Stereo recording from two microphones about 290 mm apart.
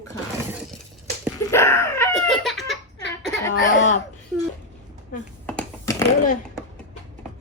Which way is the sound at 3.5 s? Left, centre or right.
Left.